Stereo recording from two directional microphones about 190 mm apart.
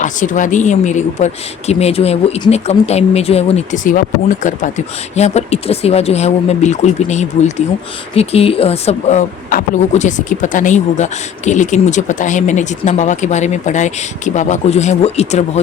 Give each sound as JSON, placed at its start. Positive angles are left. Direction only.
{"t": 0.0, "sound": "a woman's voice", "side_deg": 40}
{"t": 5.1, "sound": "a woman's voice", "side_deg": 35}